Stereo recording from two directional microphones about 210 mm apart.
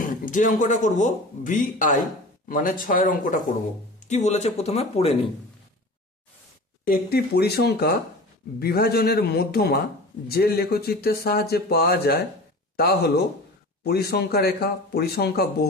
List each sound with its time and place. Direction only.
0.0 s speech: 40° left (ahead or behind)
6.8 s speech: 45° left (ahead or behind)